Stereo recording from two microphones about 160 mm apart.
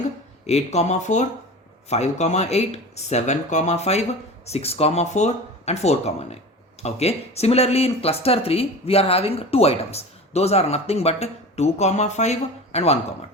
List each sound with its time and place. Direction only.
0.4 s speech: 45° left (ahead or behind)